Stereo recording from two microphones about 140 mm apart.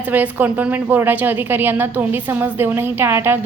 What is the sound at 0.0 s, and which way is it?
A woman's voice, 15° right (ahead or behind).